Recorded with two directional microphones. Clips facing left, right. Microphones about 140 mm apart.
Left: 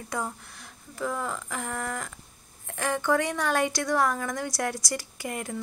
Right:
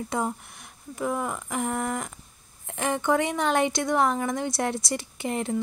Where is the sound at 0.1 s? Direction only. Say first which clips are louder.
Right 2 dB; 20° right (ahead or behind).